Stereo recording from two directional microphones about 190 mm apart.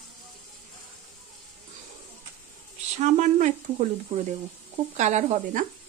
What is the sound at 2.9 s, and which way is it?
Speech, 35° right (ahead or behind).